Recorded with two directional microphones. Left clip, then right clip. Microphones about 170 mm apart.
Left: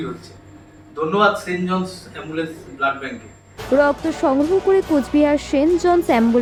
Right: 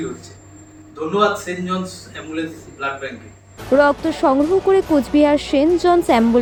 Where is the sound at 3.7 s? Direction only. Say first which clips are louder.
Right 2 dB; centre (ahead or behind).